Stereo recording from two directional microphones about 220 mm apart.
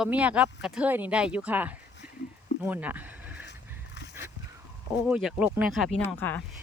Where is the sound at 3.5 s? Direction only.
50° left (ahead or behind).